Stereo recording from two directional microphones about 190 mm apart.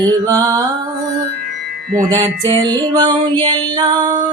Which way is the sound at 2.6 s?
20° right (ahead or behind).